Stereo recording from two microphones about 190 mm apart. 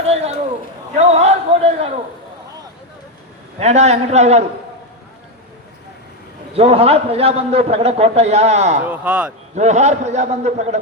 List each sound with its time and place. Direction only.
0.1 s a man's voice: 35° right (ahead or behind)
0.9 s a sound: 35° right (ahead or behind)
3.6 s a man's voice: 35° right (ahead or behind)
6.5 s a man's voice: 30° right (ahead or behind)
8.8 s speech: 5° right (ahead or behind)
9.6 s a man's voice: 35° right (ahead or behind)